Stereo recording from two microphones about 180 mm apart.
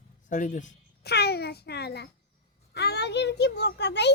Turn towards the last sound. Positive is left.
turn(degrees=70)  # may be behind; listen again after turning